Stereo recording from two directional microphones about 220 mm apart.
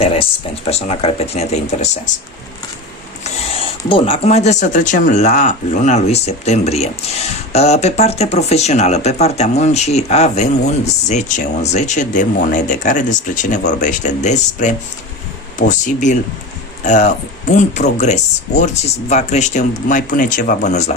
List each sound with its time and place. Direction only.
0.0 s speech: 25° left (ahead or behind)
3.2 s speech: 25° left (ahead or behind)